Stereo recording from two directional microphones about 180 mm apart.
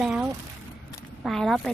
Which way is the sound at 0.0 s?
5° right (ahead or behind).